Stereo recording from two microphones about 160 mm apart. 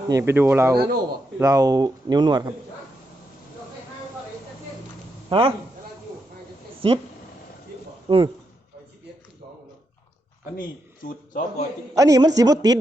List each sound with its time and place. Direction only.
0.1 s speech: 15° right (ahead or behind)
5.3 s a man's voice: 35° right (ahead or behind)
6.7 s a sound: 35° right (ahead or behind)
8.0 s speech: 35° right (ahead or behind)
10.6 s a man's voice: 60° left (ahead or behind)
11.9 s speech: 20° right (ahead or behind)